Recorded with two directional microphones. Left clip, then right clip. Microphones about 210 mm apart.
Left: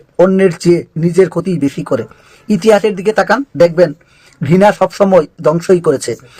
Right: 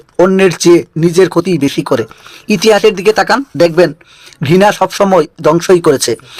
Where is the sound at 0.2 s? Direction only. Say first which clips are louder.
Right 1 dB; 20° right (ahead or behind).